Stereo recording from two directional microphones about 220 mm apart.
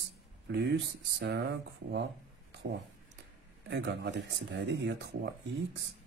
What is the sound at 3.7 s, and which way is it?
Speech, 55° right (ahead or behind).